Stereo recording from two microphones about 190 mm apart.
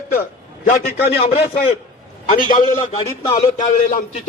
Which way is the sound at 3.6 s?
40° left (ahead or behind).